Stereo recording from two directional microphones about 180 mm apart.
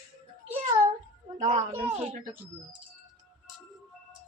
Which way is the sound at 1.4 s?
35° right (ahead or behind).